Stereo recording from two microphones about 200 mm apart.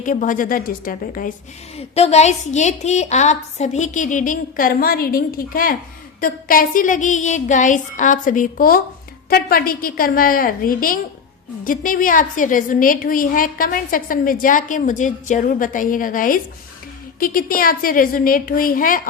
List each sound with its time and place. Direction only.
0.0 s a woman's voice: 40° left (ahead or behind)
1.7 s a woman's voice: 30° left (ahead or behind)